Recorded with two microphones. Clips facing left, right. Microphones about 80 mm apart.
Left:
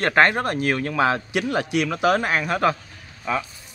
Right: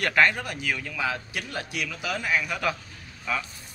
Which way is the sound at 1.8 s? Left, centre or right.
Left.